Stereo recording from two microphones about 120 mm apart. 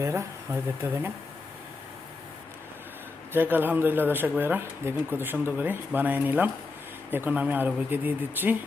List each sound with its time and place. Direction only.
0.0 s speech: 25° right (ahead or behind)
3.3 s speech: 15° right (ahead or behind)